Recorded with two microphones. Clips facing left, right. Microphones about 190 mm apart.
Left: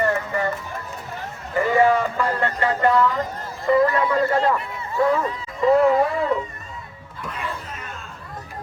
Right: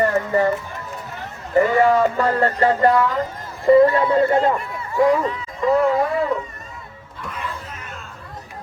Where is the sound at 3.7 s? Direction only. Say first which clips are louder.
Right 5 dB; 30° right (ahead or behind); by 5.3 s 15° right (ahead or behind).